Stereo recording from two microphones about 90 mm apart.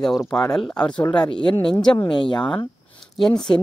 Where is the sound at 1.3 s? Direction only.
60° left (ahead or behind).